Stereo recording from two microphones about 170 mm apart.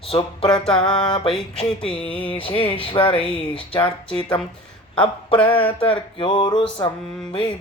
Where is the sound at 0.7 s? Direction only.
30° left (ahead or behind).